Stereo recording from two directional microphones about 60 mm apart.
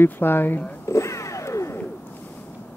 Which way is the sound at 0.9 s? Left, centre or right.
Left.